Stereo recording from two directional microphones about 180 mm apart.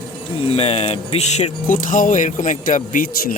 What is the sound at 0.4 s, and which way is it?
Speech, 30° left (ahead or behind).